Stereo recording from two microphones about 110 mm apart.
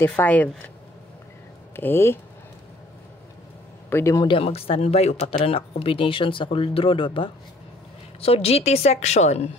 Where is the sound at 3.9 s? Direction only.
25° left (ahead or behind).